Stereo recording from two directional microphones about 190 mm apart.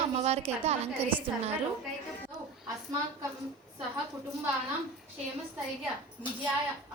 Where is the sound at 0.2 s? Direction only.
35° right (ahead or behind).